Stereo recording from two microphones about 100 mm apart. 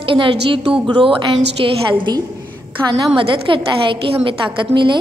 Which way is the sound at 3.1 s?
60° right (ahead or behind).